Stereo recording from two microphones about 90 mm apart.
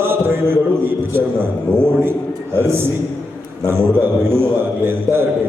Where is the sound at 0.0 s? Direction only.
25° right (ahead or behind).